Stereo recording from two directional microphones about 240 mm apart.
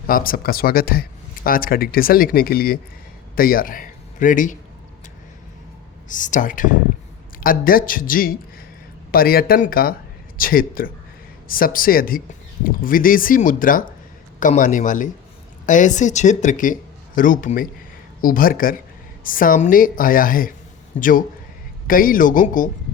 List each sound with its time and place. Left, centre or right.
0.1 s speech: left
6.1 s speech: left